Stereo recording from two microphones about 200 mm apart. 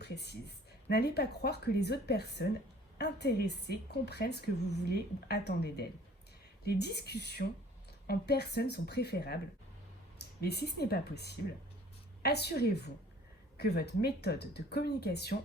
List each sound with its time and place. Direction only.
0.0 s speech: 55° left (ahead or behind)
10.4 s speech: 55° left (ahead or behind)